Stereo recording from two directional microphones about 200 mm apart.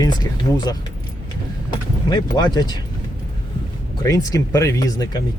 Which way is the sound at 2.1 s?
20° left (ahead or behind).